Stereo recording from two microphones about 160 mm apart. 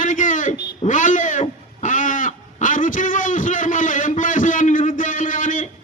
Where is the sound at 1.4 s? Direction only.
50° left (ahead or behind).